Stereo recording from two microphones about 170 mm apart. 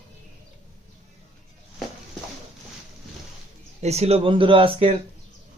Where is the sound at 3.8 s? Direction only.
40° right (ahead or behind).